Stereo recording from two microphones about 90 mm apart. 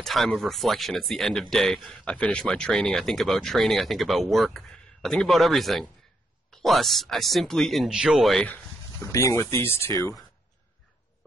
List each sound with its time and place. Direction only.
0.0 s speech: 5° left (ahead or behind)
8.5 s a sound: 5° left (ahead or behind)
9.0 s speech: 35° left (ahead or behind)